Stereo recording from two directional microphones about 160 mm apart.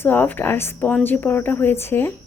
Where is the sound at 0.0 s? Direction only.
10° left (ahead or behind).